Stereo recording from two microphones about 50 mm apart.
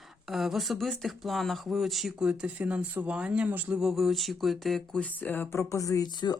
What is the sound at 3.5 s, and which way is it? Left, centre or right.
Speech, right.